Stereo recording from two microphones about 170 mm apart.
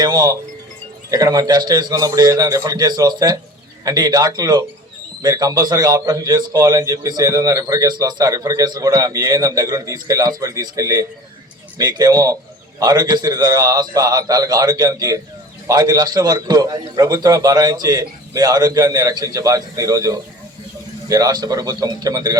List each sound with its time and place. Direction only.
0.0 s a man's voice: 20° right (ahead or behind)